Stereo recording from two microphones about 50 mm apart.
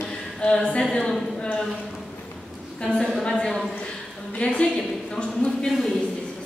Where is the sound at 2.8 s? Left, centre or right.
Centre.